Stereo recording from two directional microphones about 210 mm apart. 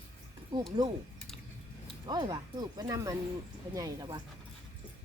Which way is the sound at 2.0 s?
20° right (ahead or behind).